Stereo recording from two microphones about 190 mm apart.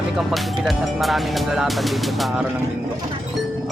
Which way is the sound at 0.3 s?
Centre (ahead or behind).